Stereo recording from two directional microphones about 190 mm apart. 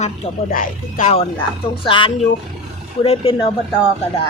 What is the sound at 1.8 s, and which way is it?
Speech, 25° left (ahead or behind).